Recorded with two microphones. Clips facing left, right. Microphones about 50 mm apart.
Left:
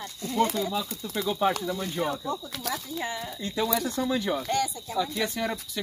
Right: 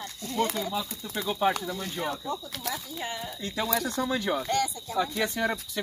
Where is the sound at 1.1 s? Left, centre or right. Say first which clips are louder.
Left 1 dB; centre.